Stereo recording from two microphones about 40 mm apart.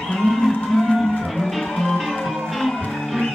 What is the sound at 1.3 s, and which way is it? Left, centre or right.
Music, centre.